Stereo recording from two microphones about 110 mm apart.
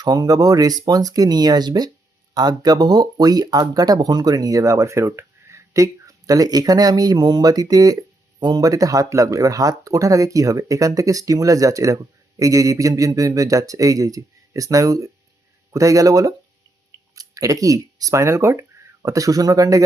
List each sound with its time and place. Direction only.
0.0 s speech: 35° right (ahead or behind)